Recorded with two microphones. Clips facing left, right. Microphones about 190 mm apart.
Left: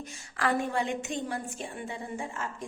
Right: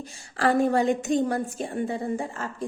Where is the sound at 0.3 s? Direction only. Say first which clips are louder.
Right 7 dB; 35° right (ahead or behind).